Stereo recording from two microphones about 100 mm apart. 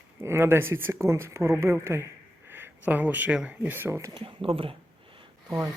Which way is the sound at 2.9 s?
15° right (ahead or behind).